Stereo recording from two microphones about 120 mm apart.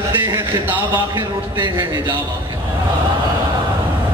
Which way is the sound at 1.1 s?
35° right (ahead or behind).